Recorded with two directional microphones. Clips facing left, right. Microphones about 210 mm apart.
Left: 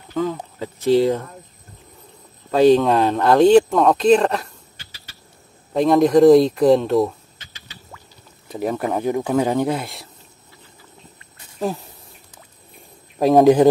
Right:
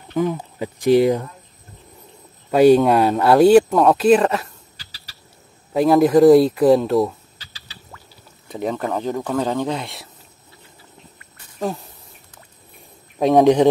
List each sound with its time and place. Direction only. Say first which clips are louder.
0.1 s speech: right 2 dB; 15° right (ahead or behind)
2.5 s speech: right 1 dB; 10° right (ahead or behind)
4.7 s a sound: left 1 dB; 35° right (ahead or behind)
5.7 s speech: right 1 dB; 5° right (ahead or behind)
7.3 s rodents: left 1 dB; 35° right (ahead or behind)
8.5 s speech: left 1 dB; 5° left (ahead or behind)
8.8 s speech: left 2 dB; 15° left (ahead or behind)
13.2 s speech: left 1 dB; centre (ahead or behind)